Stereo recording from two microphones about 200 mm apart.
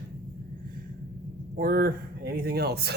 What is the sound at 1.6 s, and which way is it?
Speech, 50° right (ahead or behind).